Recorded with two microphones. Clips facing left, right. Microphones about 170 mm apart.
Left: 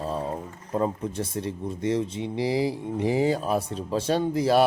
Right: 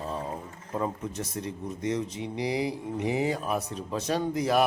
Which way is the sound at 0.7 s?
30° left (ahead or behind).